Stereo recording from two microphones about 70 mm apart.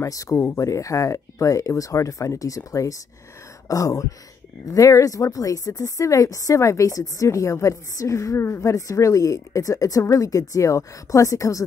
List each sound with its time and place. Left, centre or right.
0.0 s speech: left